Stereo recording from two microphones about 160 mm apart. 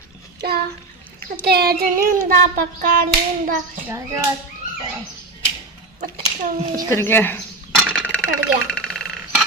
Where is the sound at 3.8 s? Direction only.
15° right (ahead or behind).